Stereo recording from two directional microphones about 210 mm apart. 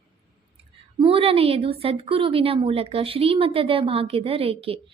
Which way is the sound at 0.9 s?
25° right (ahead or behind).